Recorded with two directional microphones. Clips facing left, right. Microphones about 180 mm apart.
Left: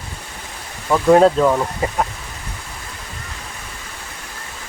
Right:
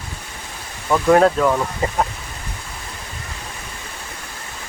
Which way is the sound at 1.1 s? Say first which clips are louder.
Left 2 dB; 15° left (ahead or behind).